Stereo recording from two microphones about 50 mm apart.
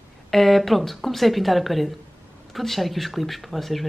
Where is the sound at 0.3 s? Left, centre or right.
Centre.